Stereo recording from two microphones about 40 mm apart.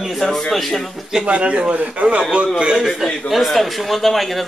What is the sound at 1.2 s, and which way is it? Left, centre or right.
A man's voice, right.